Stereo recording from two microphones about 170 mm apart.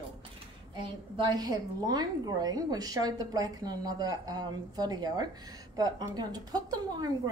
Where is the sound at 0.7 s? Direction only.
25° right (ahead or behind).